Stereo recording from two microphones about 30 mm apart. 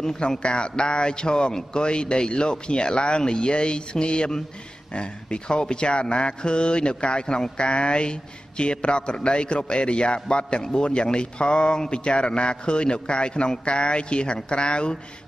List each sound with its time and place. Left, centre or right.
0.4 s speech: left